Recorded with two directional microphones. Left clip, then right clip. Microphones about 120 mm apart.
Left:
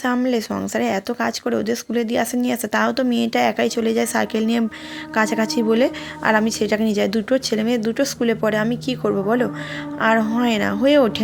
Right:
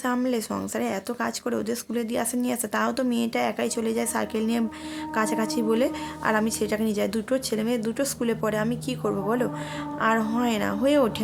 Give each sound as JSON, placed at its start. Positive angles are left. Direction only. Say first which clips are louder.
{"t": 0.3, "sound": "speech", "louder": "left 6 dB", "side_deg": 20}